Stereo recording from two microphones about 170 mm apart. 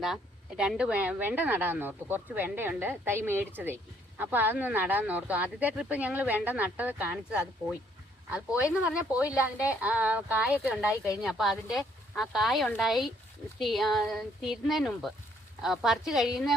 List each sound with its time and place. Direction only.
0.0 s speech: 5° right (ahead or behind)
8.8 s speech: 5° right (ahead or behind)
10.6 s speech: 5° left (ahead or behind)
10.9 s speech: 20° left (ahead or behind)
11.2 s speech: centre (ahead or behind)